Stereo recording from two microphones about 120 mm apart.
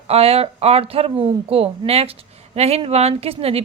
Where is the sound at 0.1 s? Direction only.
55° right (ahead or behind).